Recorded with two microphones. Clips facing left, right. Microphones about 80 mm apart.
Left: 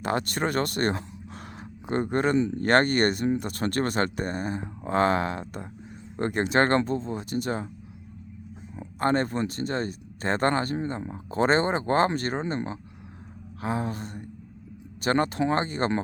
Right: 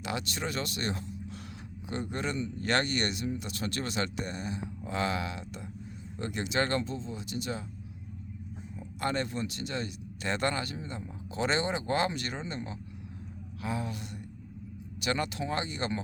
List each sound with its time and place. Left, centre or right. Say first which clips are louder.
0.0 s speech: left 8 dB; left
9.0 s speech: left 7 dB; left